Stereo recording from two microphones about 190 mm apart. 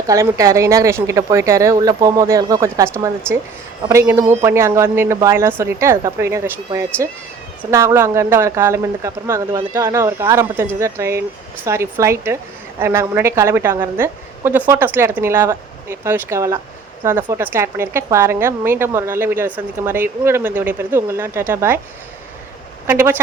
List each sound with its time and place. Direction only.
0.1 s a woman's voice: 15° right (ahead or behind)
22.9 s a woman's voice: 10° right (ahead or behind)